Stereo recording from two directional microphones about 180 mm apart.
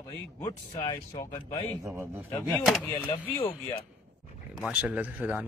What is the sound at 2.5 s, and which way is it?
Speech, 5° left (ahead or behind).